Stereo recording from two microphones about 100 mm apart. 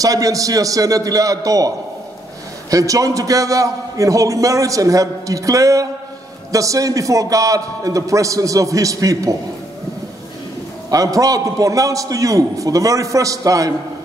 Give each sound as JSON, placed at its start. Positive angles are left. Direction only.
{"t": 0.0, "sound": "a man's voice", "side_deg": -35}
{"t": 2.7, "sound": "a man's voice", "side_deg": -35}
{"t": 10.9, "sound": "a man's voice", "side_deg": -35}